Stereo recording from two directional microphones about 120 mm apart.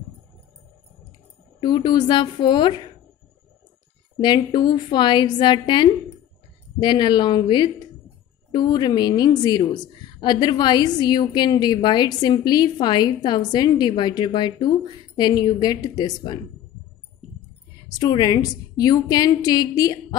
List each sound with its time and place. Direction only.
1.6 s a woman's voice: 35° left (ahead or behind)
4.2 s a woman's voice: 40° left (ahead or behind)
17.9 s a woman's voice: 35° left (ahead or behind)